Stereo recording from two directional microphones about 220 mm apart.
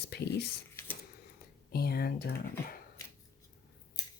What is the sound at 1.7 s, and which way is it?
Speech, 45° left (ahead or behind).